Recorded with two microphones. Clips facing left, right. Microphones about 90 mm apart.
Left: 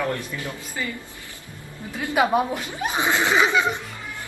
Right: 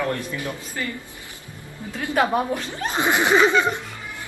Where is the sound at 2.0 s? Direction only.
10° left (ahead or behind).